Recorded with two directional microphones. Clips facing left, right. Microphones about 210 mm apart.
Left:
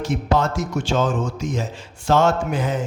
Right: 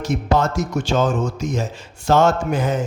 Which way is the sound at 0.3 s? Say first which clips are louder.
Right 2 dB; 40° right (ahead or behind).